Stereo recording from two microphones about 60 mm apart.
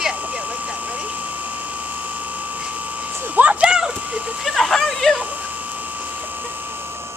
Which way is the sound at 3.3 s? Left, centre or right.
Right.